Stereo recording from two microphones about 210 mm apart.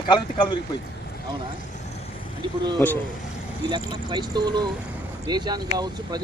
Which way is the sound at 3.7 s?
20° right (ahead or behind).